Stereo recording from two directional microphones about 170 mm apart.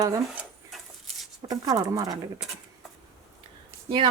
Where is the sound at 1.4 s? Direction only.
20° right (ahead or behind).